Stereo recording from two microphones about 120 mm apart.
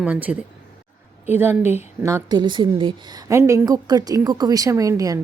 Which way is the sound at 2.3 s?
40° right (ahead or behind).